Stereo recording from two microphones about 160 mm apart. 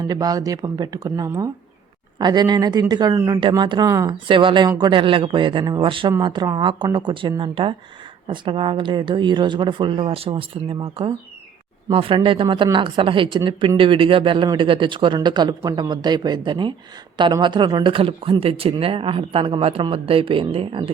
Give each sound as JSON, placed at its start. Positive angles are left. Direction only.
{"t": 0.1, "sound": "a woman's voice", "side_deg": -25}